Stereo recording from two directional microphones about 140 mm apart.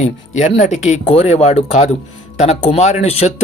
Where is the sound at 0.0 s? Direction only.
60° left (ahead or behind).